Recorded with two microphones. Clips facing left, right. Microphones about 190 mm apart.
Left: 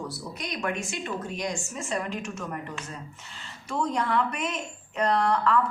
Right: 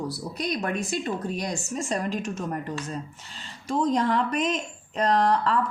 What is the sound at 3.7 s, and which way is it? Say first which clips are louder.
A woman's voice: right 3 dB; 35° right (ahead or behind).